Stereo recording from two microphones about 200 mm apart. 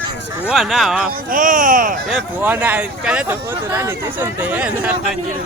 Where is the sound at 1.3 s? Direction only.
40° right (ahead or behind).